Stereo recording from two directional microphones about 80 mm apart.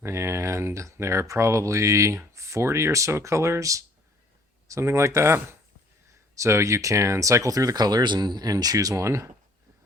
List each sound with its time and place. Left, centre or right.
0.0 s speech: right